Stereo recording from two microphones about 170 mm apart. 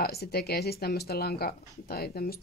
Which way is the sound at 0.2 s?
70° left (ahead or behind).